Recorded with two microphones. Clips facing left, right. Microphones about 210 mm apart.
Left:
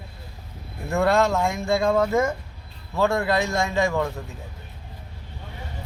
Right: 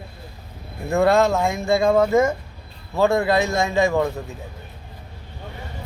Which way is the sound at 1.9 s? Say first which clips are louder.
Right 5 dB; 20° right (ahead or behind).